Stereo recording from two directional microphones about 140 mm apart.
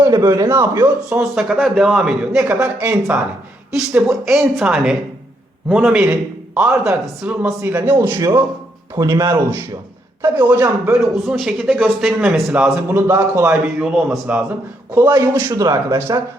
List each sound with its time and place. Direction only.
0.0 s a man's voice: 20° right (ahead or behind)
1.2 s speech: centre (ahead or behind)
2.4 s speech: 15° right (ahead or behind)
3.8 s a man's voice: 5° right (ahead or behind)
11.0 s speech: centre (ahead or behind)
14.9 s speech: 20° right (ahead or behind)
15.6 s a man's voice: 25° right (ahead or behind)